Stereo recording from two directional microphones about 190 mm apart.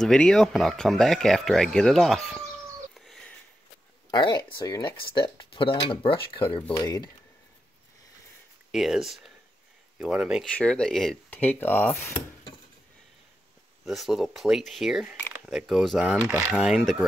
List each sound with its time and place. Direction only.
0.0 s speech: 5° left (ahead or behind)
4.1 s speech: 25° left (ahead or behind)
8.7 s speech: centre (ahead or behind)
10.5 s a sound: 5° left (ahead or behind)
13.8 s speech: centre (ahead or behind)